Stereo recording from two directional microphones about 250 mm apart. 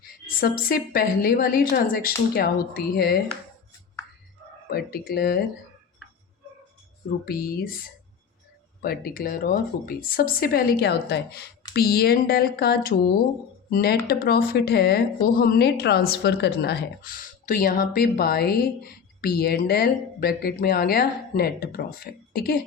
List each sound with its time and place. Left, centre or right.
0.3 s speech: left
4.7 s speech: left
7.3 s speech: left
8.8 s speech: left